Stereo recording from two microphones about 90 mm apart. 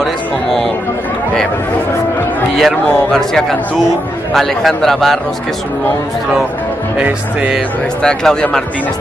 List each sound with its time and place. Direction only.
0.0 s speech: 5° left (ahead or behind)
2.6 s a man's voice: 5° left (ahead or behind)
7.0 s music: 15° right (ahead or behind)
8.0 s speech: 10° left (ahead or behind)